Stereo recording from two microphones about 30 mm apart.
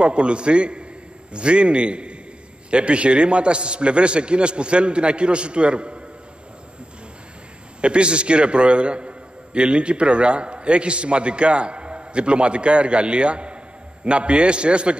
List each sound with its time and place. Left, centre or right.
0.0 s a man's voice: right
7.8 s a man's voice: right